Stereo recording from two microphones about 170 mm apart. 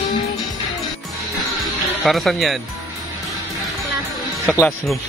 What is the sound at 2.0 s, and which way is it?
Speech, centre (ahead or behind).